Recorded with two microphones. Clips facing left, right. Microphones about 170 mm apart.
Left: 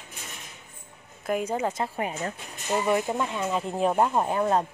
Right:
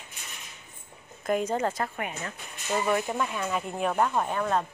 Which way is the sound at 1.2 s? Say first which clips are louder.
Even; 5° left (ahead or behind).